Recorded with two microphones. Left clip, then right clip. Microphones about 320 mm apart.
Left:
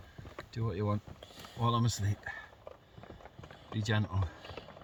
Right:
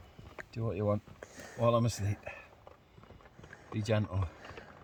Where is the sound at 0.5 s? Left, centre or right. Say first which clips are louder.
Right 3 dB; right.